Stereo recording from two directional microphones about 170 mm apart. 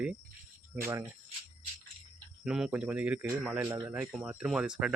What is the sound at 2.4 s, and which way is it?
Speech, 5° right (ahead or behind).